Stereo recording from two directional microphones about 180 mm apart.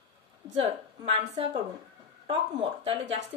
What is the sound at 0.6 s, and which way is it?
A woman's voice, 35° right (ahead or behind).